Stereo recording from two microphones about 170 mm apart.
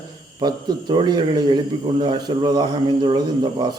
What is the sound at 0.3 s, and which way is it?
A man's voice, 25° right (ahead or behind).